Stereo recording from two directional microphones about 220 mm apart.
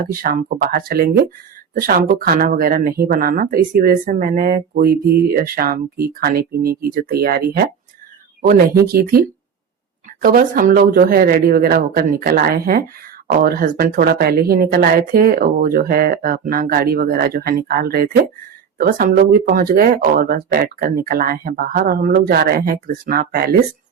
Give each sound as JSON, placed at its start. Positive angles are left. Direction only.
{"t": 0.1, "sound": "speech", "side_deg": -40}